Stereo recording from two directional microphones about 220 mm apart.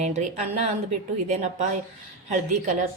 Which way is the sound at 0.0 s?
30° right (ahead or behind).